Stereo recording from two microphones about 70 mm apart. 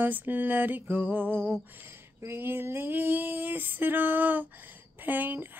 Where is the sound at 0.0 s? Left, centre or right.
Right.